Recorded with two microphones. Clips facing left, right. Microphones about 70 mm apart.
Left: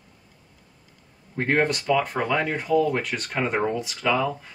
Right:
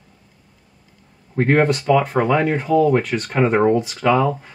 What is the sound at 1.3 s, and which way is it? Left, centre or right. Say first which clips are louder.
Speech: right 6 dB; right.